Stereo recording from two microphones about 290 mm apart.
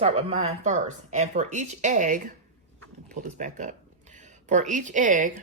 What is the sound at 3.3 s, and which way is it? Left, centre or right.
Speech, right.